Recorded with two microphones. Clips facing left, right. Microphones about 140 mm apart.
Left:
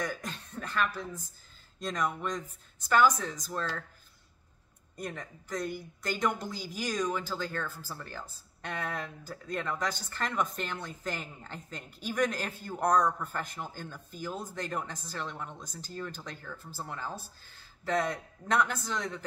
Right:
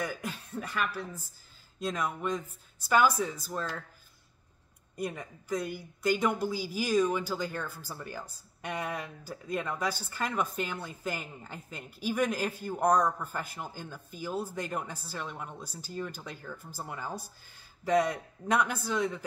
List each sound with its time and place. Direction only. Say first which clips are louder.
0.0 s a sound: even; 10° right (ahead or behind)
1.8 s a woman's voice: even; 5° right (ahead or behind)
4.9 s a woman's voice: right 3 dB; 10° right (ahead or behind)